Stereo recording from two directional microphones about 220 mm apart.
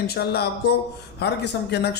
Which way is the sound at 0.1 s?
45° left (ahead or behind).